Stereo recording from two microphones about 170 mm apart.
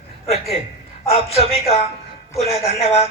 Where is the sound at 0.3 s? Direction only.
35° left (ahead or behind).